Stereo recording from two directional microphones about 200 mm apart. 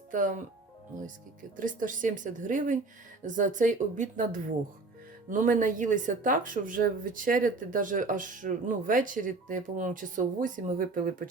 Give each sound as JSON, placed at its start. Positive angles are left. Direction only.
{"t": 0.1, "sound": "speech", "side_deg": -40}
{"t": 1.5, "sound": "speech", "side_deg": -40}